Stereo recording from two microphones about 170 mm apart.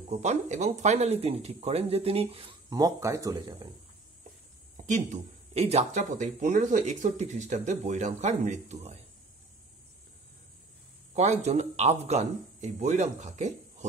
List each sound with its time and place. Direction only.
0.1 s speech: 40° right (ahead or behind)
2.7 s speech: 20° right (ahead or behind)
4.8 s speech: 45° right (ahead or behind)
11.1 s speech: 40° right (ahead or behind)